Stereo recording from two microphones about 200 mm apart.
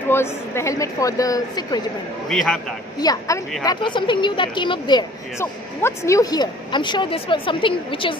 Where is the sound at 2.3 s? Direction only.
5° left (ahead or behind).